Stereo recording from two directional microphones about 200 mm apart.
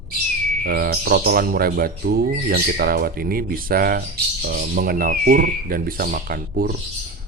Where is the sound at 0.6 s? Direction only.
50° right (ahead or behind).